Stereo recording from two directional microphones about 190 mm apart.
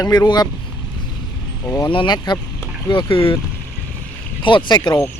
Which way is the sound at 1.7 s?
25° left (ahead or behind).